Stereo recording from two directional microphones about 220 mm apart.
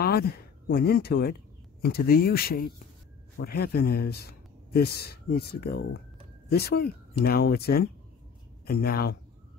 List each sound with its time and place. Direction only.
0.0 s a man's voice: 45° left (ahead or behind)